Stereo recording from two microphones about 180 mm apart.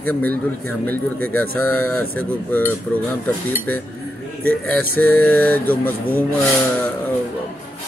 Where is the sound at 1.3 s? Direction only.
10° left (ahead or behind).